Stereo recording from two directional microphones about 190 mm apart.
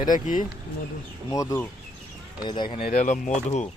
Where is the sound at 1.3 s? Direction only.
20° left (ahead or behind).